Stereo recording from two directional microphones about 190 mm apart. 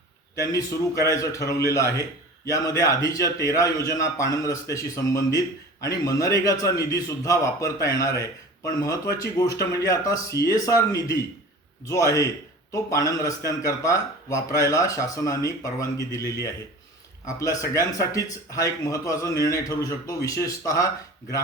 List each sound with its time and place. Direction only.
0.3 s a man's voice: 15° left (ahead or behind)